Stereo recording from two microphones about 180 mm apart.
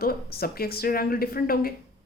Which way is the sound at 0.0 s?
60° left (ahead or behind).